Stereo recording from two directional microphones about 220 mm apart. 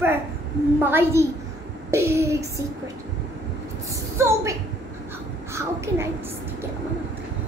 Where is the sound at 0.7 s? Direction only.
10° right (ahead or behind).